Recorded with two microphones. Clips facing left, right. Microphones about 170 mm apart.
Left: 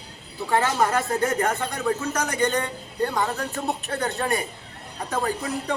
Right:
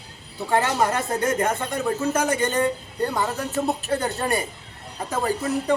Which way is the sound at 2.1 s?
25° right (ahead or behind).